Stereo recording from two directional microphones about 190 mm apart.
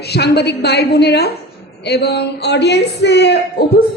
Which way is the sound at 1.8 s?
60° left (ahead or behind).